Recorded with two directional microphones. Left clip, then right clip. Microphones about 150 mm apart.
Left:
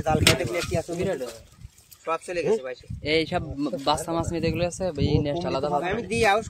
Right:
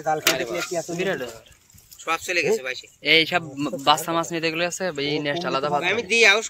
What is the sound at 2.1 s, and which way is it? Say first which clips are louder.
Speech: right 4 dB; 65° left (ahead or behind).